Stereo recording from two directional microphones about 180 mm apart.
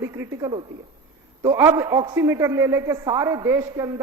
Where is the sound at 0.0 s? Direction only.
15° right (ahead or behind).